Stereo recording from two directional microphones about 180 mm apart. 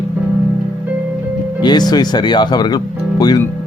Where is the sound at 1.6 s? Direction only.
25° left (ahead or behind).